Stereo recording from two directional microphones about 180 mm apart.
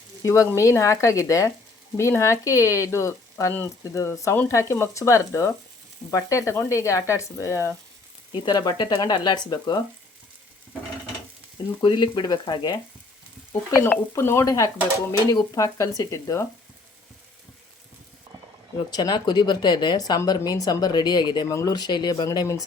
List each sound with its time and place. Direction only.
0.2 s speech: 15° left (ahead or behind)
11.8 s speech: 25° left (ahead or behind)
18.9 s speech: 20° left (ahead or behind)